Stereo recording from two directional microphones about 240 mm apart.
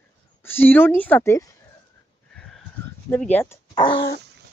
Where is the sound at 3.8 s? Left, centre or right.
Centre.